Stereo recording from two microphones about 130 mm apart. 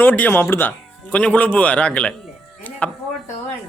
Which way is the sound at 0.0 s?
15° left (ahead or behind).